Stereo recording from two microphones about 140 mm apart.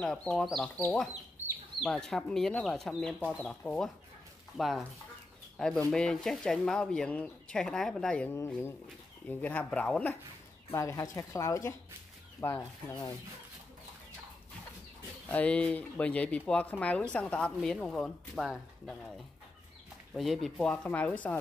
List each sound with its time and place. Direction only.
0.0 s speech: 5° left (ahead or behind)
5.9 s speech: 5° left (ahead or behind)
10.7 s speech: 20° left (ahead or behind)
15.2 s speech: 10° left (ahead or behind)
20.2 s speech: centre (ahead or behind)